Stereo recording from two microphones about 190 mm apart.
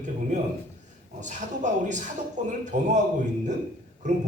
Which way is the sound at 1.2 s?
40° right (ahead or behind).